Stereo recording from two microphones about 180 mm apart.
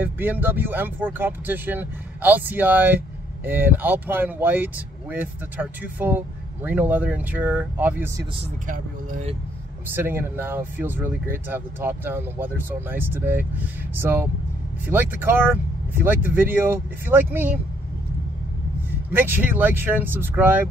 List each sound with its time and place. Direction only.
0.0 s speech: 10° right (ahead or behind)
8.6 s speech: 50° right (ahead or behind)
9.9 s speech: 10° right (ahead or behind)
19.1 s speech: 10° right (ahead or behind)